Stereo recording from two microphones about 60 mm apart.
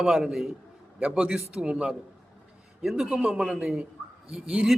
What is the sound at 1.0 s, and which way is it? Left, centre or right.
A man's voice, centre.